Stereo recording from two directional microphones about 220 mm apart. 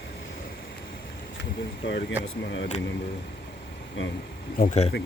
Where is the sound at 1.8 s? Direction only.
50° left (ahead or behind).